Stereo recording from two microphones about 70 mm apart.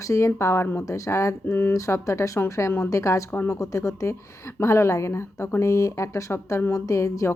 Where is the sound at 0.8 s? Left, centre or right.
Left.